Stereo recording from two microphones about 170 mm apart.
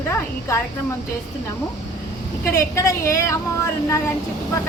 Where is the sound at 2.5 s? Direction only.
20° left (ahead or behind).